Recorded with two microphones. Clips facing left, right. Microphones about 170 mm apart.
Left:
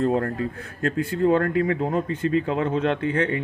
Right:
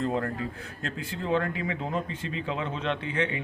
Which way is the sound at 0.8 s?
50° left (ahead or behind).